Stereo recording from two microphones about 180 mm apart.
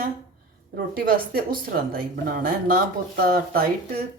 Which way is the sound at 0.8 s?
50° right (ahead or behind).